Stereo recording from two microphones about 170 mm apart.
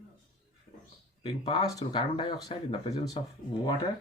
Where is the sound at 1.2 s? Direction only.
25° left (ahead or behind).